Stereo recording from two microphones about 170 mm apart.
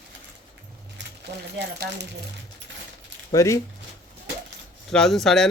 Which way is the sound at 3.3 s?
15° left (ahead or behind).